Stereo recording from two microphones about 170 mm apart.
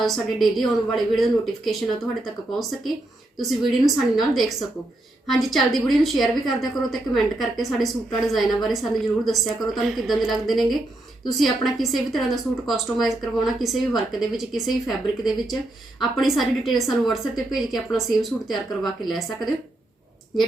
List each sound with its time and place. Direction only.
0.0 s a woman's voice: centre (ahead or behind)